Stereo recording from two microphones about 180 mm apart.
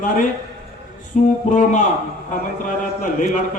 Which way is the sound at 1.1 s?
45° left (ahead or behind).